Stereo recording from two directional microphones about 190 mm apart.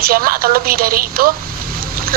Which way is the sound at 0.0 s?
50° right (ahead or behind).